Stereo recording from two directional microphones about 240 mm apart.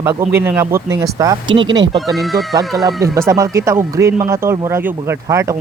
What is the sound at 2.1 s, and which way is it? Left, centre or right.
Speech, centre.